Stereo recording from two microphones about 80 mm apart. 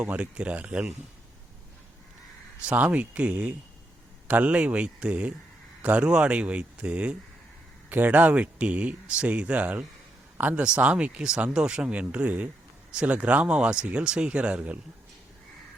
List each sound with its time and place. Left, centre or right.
0.0 s speech: centre
2.6 s a man's voice: centre